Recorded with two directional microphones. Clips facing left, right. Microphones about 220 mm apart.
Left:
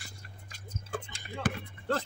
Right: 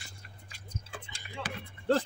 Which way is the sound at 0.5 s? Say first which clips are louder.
Left 7 dB; 45° left (ahead or behind).